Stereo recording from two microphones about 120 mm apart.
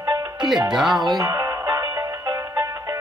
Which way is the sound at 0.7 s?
Centre (ahead or behind).